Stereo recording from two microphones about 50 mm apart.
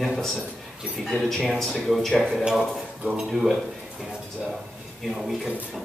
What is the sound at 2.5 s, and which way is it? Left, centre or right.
Speech, centre.